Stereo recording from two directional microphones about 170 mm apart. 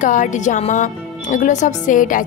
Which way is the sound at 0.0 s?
50° left (ahead or behind).